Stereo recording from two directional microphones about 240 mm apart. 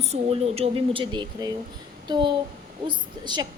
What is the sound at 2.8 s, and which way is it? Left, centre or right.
Speech, centre.